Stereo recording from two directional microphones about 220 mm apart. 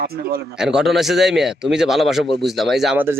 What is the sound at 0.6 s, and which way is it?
A man's voice, centre (ahead or behind).